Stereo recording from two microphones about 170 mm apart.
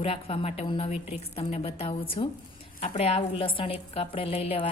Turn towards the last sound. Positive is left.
turn(degrees=35)  # may be behind; listen again after turning